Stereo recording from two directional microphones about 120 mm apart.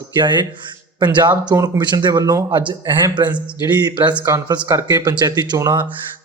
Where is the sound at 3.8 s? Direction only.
40° right (ahead or behind).